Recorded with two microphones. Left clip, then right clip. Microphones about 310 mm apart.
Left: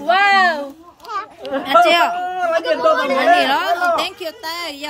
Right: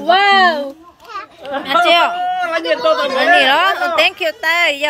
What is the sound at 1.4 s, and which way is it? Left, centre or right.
Speech, left.